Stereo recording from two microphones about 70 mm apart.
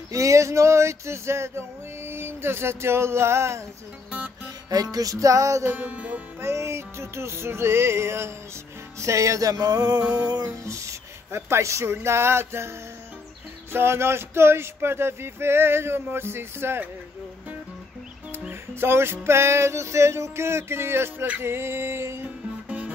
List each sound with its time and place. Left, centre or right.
0.1 s male singing: right
4.6 s music: right
5.7 s music: right
6.4 s male singing: right
9.0 s music: right
9.9 s music: centre
10.2 s music: right
10.7 s speech: right
13.7 s male singing: right
18.5 s male singing: right